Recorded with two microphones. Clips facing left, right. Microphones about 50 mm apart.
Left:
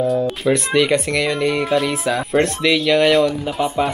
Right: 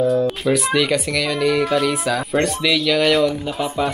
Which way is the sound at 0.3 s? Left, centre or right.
Centre.